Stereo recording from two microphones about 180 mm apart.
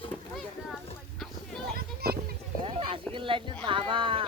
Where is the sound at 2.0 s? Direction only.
60° right (ahead or behind).